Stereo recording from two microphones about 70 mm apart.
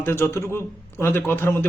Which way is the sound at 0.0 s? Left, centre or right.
Left.